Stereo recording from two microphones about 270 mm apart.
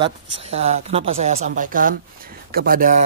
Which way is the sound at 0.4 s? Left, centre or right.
Right.